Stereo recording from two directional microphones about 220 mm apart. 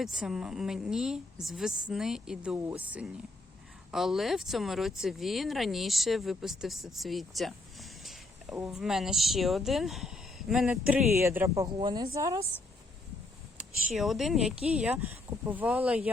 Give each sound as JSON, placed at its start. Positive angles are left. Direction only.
{"t": 0.0, "sound": "speech", "side_deg": 0}
{"t": 13.9, "sound": "speech", "side_deg": 0}